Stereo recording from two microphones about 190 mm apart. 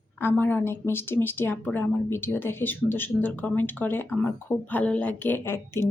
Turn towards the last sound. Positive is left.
turn(degrees=15)  # may be behind; listen again after turning